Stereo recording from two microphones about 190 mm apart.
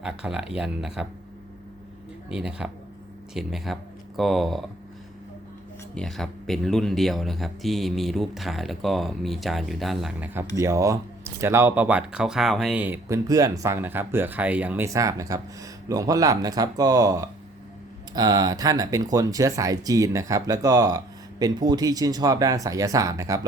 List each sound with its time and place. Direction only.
0.0 s speech: 5° right (ahead or behind)
2.3 s speech: 5° right (ahead or behind)
5.9 s speech: 5° left (ahead or behind); by 23.5 s 15° right (ahead or behind)